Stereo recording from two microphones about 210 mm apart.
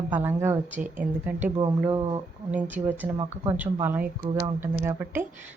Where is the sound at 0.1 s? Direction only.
10° right (ahead or behind).